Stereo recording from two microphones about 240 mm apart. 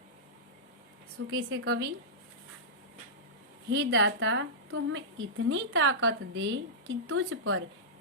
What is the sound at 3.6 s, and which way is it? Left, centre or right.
A woman's voice, right.